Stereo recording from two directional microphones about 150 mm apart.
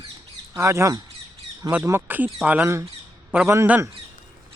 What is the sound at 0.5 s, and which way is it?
A man's voice, 20° right (ahead or behind).